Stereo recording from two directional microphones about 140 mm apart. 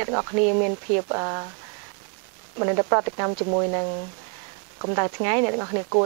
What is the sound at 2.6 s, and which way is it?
Speech, 25° right (ahead or behind).